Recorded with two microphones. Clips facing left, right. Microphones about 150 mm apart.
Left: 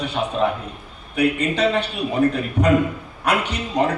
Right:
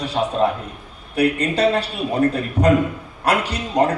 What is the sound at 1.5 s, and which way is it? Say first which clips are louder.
Speech: right 2 dB; 35° right (ahead or behind).